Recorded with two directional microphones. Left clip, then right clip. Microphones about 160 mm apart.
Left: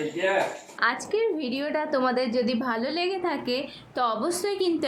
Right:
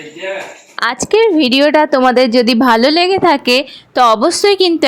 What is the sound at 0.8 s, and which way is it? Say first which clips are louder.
A woman's voice: right 13 dB; 60° right (ahead or behind).